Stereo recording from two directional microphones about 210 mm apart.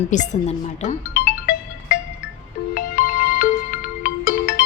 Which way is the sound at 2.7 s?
40° left (ahead or behind).